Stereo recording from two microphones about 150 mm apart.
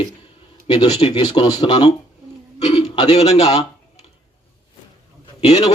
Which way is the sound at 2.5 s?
30° left (ahead or behind).